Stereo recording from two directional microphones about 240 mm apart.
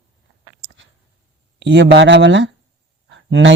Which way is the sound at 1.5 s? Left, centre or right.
Right.